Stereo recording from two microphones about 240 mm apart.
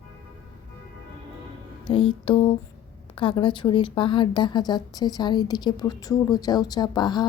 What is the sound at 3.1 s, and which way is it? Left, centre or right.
A woman's voice, left.